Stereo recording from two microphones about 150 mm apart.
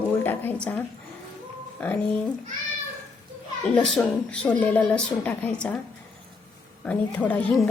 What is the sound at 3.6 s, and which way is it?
Speech, 5° left (ahead or behind).